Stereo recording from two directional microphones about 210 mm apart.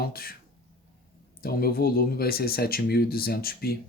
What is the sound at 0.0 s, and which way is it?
Speech, 45° left (ahead or behind).